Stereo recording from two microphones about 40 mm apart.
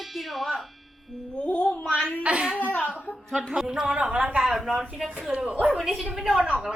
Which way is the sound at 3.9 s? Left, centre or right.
Right.